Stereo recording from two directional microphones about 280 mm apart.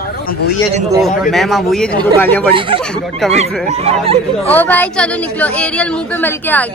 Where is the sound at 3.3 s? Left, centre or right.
Right.